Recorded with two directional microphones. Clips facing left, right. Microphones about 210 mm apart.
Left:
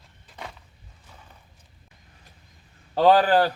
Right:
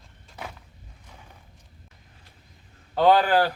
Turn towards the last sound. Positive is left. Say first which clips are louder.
# left 1 dB
turn(degrees=35)  # may be behind; listen again after turning